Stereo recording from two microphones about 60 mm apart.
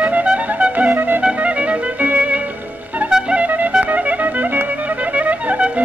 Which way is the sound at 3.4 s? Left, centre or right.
Right.